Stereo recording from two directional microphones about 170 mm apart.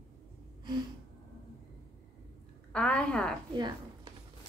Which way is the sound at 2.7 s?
5° left (ahead or behind).